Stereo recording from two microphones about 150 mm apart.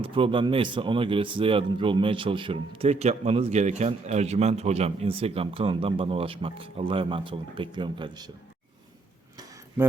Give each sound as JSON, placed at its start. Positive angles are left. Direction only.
{"t": 0.0, "sound": "speech", "side_deg": -35}